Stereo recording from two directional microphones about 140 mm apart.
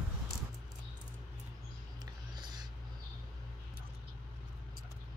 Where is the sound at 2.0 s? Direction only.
30° right (ahead or behind).